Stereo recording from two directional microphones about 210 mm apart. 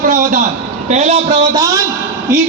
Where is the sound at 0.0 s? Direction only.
40° right (ahead or behind).